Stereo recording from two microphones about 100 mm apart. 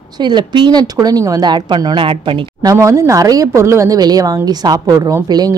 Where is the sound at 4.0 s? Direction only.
40° right (ahead or behind).